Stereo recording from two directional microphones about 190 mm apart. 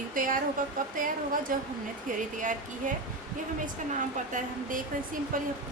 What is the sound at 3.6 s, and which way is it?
Speech, 45° right (ahead or behind).